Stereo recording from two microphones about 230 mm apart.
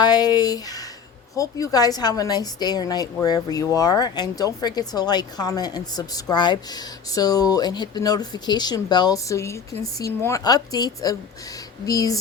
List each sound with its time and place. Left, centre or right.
0.0 s speech: centre